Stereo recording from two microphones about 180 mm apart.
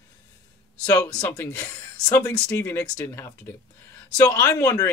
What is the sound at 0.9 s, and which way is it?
Speech, 20° left (ahead or behind).